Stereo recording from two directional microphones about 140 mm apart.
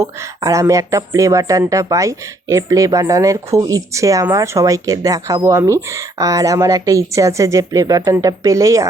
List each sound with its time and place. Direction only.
0.0 s speech: 20° right (ahead or behind)